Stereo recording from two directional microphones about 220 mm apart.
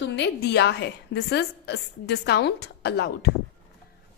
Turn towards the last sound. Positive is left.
turn(degrees=50)  # may be behind; listen again after turning